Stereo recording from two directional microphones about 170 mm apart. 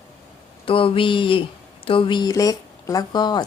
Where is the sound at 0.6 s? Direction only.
30° left (ahead or behind).